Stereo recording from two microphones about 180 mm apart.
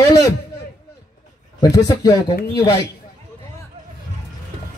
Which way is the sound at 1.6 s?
20° left (ahead or behind).